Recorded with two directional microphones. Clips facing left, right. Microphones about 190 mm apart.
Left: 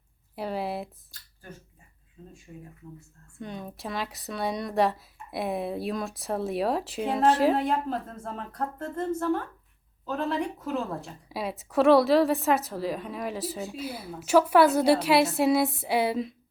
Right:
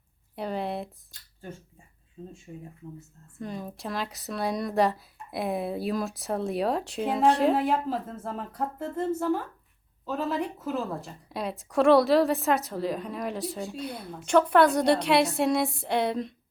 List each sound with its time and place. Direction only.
0.3 s a sound: 5° left (ahead or behind)
2.2 s speech: 25° right (ahead or behind)
3.3 s a woman's voice: centre (ahead or behind)